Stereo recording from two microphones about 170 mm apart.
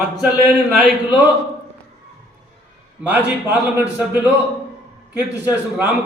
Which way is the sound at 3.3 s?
10° right (ahead or behind).